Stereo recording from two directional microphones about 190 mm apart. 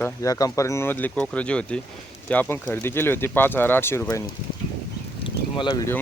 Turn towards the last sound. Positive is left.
turn(degrees=15)  # may be behind; listen again after turning